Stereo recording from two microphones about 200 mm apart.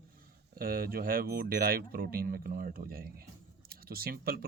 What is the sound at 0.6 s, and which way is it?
Speech, 45° right (ahead or behind).